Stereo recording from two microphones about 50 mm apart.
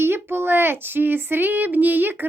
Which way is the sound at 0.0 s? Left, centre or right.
Right.